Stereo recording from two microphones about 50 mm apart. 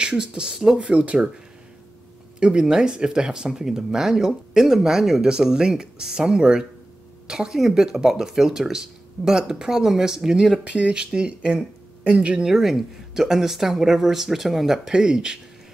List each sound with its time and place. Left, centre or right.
0.0 s speech: centre
2.4 s speech: centre
10.6 s speech: right
12.4 s speech: centre